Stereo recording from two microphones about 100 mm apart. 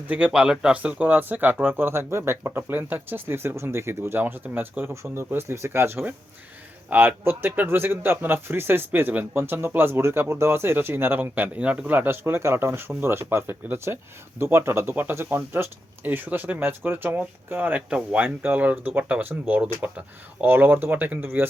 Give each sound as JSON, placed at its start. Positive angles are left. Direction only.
{"t": 0.1, "sound": "speech", "side_deg": -10}